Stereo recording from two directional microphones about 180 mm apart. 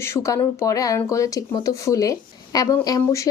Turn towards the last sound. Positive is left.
turn(degrees=20)  # may be behind; listen again after turning